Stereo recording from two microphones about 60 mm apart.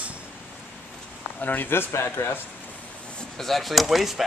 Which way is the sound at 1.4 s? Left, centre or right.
Left.